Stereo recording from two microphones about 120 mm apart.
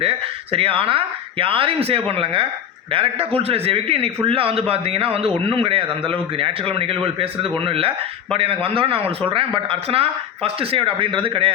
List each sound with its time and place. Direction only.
0.0 s a man's voice: 55° right (ahead or behind)